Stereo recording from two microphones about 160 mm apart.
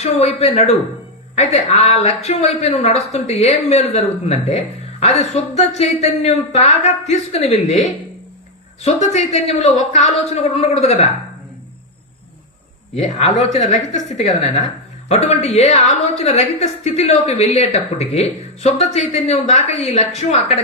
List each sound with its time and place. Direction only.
0.0 s a man's voice: 40° left (ahead or behind)
13.1 s a woman's voice: 45° left (ahead or behind)